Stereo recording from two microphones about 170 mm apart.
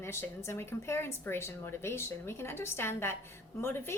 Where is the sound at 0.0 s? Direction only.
15° left (ahead or behind).